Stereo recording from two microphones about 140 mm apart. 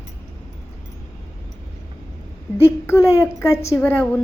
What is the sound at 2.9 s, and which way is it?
Speech, 20° left (ahead or behind).